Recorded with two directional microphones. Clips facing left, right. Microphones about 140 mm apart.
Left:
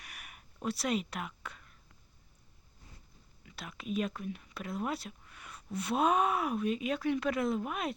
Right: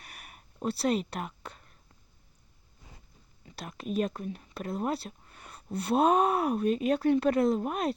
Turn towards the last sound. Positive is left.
turn(degrees=-40)  # may be behind; listen again after turning